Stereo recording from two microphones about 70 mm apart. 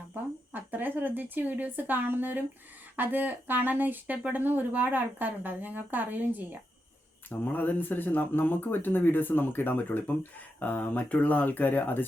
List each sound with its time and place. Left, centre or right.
0.1 s speech: right
7.3 s speech: left